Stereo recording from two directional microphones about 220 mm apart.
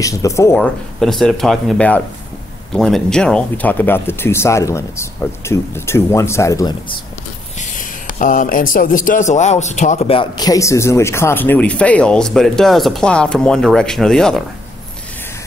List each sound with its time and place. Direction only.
0.0 s a man's voice: 15° left (ahead or behind)
1.0 s a man's voice: centre (ahead or behind)
7.7 s a sound: 35° left (ahead or behind)
8.7 s a man's voice: 40° left (ahead or behind); by 14.4 s centre (ahead or behind)